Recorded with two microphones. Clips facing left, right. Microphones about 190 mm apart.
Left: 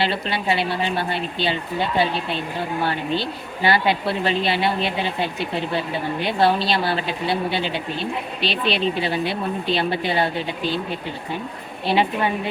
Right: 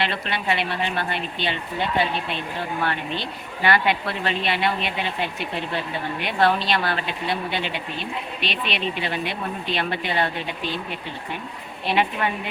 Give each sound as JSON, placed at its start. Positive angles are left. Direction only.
{"t": 0.0, "sound": "speech", "side_deg": 30}
{"t": 2.8, "sound": "speech", "side_deg": 30}
{"t": 11.9, "sound": "speech", "side_deg": 30}